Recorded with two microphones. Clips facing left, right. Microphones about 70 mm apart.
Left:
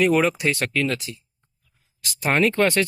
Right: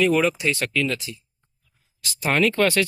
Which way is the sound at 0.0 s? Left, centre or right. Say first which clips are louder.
Left 1 dB; left.